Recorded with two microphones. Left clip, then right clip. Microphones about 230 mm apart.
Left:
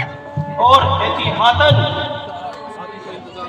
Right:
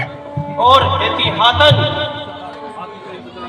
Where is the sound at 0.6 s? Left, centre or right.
Right.